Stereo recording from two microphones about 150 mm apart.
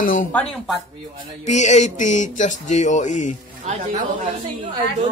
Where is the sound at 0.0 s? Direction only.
60° left (ahead or behind).